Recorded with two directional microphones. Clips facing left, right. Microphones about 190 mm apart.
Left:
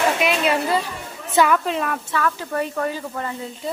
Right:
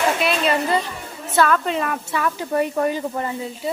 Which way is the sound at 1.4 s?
10° left (ahead or behind).